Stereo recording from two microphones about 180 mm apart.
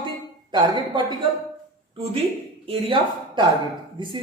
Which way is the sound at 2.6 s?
30° right (ahead or behind).